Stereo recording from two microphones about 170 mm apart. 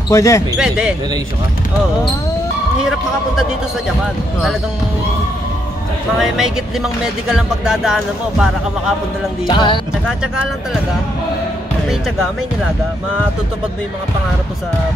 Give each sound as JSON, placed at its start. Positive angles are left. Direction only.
{"t": 0.1, "sound": "speech", "side_deg": 20}
{"t": 0.6, "sound": "music", "side_deg": -5}
{"t": 6.2, "sound": "music", "side_deg": -5}
{"t": 9.5, "sound": "speech", "side_deg": 30}